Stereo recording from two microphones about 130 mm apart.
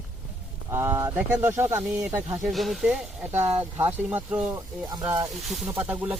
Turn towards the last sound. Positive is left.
turn(degrees=-10)  # may be behind; listen again after turning